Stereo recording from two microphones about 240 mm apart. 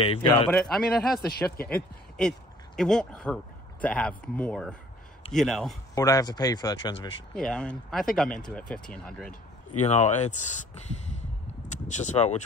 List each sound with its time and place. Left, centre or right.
0.0 s speech: left
0.6 s speech: centre
5.9 s speech: centre
7.3 s speech: centre
9.8 s speech: left